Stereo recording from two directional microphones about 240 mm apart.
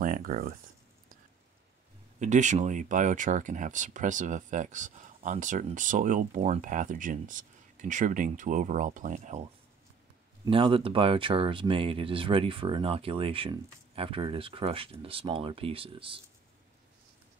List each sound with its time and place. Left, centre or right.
0.0 s speech: right
2.1 s speech: right